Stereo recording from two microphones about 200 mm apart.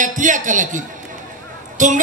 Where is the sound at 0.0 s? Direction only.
40° right (ahead or behind).